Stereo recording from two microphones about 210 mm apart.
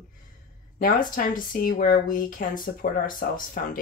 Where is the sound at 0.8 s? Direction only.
40° left (ahead or behind).